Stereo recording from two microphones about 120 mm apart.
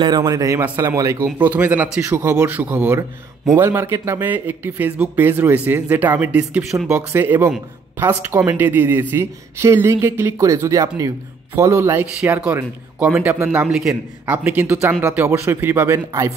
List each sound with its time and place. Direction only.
0.2 s speech: 30° right (ahead or behind); by 2.0 s 10° right (ahead or behind)
2.0 s speech: 20° right (ahead or behind)